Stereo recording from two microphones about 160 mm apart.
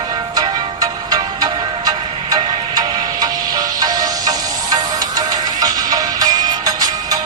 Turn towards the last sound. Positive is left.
turn(degrees=-25)  # may be behind; listen again after turning